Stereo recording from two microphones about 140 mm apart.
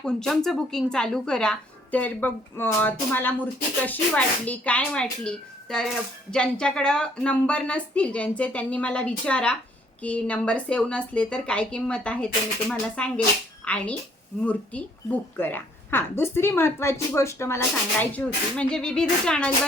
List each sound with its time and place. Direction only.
0.0 s a woman's voice: 5° left (ahead or behind)